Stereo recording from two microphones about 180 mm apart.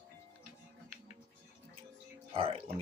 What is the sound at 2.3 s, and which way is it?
Music, 30° right (ahead or behind).